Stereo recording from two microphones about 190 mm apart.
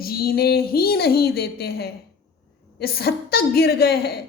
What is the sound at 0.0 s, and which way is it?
A woman's voice, 50° left (ahead or behind).